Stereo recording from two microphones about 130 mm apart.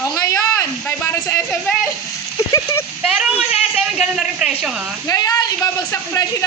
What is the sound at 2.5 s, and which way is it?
Speech, 25° left (ahead or behind).